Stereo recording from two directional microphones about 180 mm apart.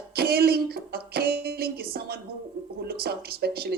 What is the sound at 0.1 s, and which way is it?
Music, 60° right (ahead or behind).